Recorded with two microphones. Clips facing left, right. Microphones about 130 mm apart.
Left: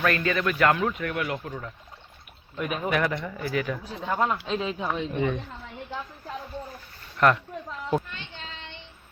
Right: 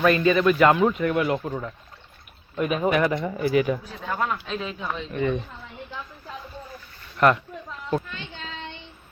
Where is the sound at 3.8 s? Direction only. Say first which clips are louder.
Left 2 dB; 20° left (ahead or behind).